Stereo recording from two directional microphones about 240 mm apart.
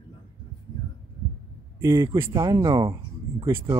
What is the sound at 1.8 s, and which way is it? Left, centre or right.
Speech, centre.